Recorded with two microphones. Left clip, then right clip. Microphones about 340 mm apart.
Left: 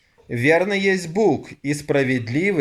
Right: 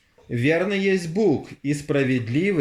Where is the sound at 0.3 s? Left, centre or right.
Centre.